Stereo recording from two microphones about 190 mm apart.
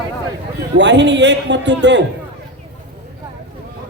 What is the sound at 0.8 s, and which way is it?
A man's voice, 65° right (ahead or behind).